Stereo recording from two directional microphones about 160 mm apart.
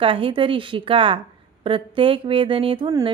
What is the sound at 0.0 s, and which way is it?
Speech, 35° right (ahead or behind).